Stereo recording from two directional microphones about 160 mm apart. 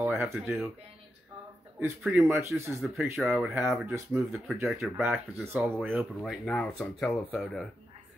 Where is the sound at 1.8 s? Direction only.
15° right (ahead or behind).